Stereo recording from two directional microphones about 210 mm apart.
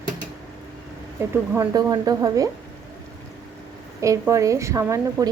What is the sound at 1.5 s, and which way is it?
Speech, 15° right (ahead or behind).